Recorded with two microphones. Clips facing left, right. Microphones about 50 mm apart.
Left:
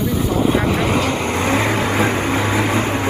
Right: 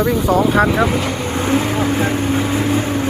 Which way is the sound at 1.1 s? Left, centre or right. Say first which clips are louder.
Even; left.